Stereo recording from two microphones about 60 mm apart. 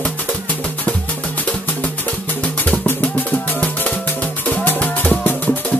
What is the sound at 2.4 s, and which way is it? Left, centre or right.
Music, left.